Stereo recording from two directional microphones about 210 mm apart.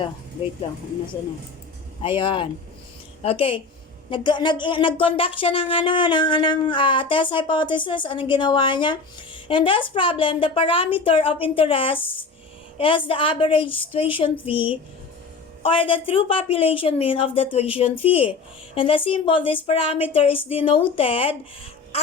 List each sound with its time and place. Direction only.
2.0 s speech: 25° left (ahead or behind)